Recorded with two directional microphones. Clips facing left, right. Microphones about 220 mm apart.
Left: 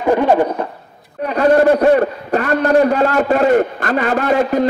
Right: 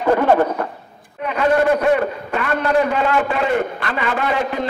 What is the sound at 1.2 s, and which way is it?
A man's voice, 40° left (ahead or behind).